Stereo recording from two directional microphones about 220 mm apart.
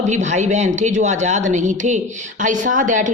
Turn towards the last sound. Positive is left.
turn(degrees=-35)  # may be behind; listen again after turning